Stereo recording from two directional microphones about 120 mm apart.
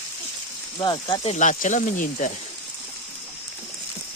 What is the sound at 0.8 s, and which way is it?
Speech, 40° left (ahead or behind).